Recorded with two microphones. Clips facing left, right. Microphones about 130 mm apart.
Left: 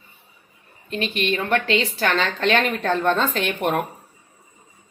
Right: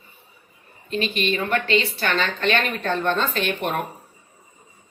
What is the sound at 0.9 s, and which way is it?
Speech, 60° left (ahead or behind).